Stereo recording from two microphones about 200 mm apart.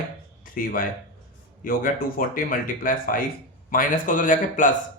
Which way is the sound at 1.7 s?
45° left (ahead or behind).